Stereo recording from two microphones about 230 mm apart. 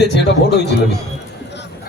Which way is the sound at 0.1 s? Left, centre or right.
Left.